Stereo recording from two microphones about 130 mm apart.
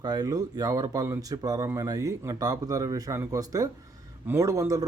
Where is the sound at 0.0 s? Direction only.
30° right (ahead or behind).